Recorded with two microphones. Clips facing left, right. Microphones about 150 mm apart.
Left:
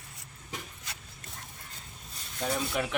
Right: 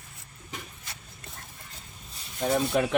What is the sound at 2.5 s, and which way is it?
Speech, 45° right (ahead or behind).